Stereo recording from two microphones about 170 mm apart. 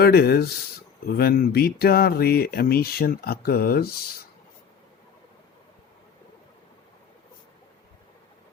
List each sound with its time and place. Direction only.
0.0 s speech: 65° left (ahead or behind)